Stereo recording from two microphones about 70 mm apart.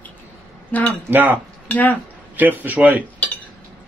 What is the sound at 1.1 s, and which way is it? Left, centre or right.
Speech, right.